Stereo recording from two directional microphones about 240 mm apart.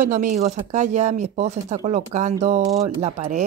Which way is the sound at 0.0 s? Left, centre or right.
Right.